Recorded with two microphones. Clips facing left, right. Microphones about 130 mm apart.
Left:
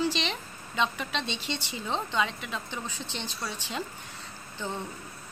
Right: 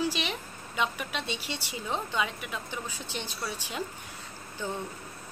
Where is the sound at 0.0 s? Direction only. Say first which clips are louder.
Left 1 dB; 10° right (ahead or behind).